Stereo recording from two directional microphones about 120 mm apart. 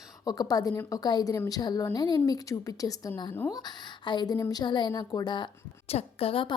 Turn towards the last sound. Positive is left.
turn(degrees=50)  # may be behind; listen again after turning